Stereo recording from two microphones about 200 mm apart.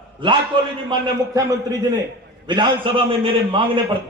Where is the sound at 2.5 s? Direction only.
20° right (ahead or behind).